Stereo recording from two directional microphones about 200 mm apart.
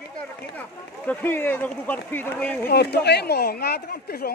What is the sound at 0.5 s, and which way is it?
Speech, 10° left (ahead or behind).